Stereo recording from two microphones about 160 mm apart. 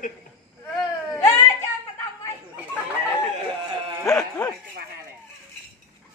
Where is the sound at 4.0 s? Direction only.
20° left (ahead or behind).